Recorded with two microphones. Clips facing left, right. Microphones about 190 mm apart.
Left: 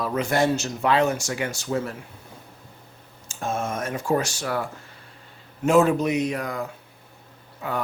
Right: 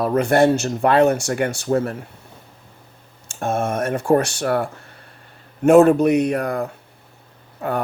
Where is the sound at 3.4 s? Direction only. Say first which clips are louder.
Right 6 dB; 60° right (ahead or behind).